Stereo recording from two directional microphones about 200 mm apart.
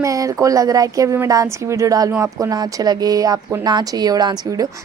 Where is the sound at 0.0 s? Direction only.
15° right (ahead or behind).